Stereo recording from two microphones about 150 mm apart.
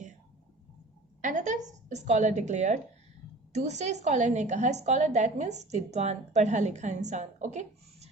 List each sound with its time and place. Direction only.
1.2 s a woman's voice: 55° right (ahead or behind)